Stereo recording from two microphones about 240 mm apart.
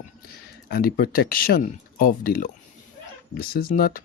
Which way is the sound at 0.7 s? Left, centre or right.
Left.